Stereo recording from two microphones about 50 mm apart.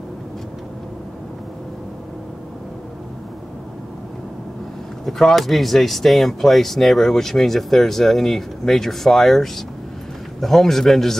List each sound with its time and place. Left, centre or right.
5.0 s speech: centre